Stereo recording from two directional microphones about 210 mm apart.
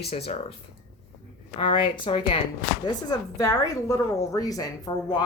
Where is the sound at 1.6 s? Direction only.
25° left (ahead or behind).